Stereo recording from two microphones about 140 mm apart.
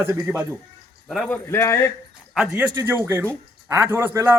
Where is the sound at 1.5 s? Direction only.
20° left (ahead or behind).